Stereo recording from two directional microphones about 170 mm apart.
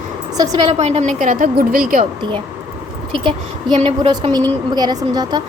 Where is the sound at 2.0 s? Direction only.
30° right (ahead or behind).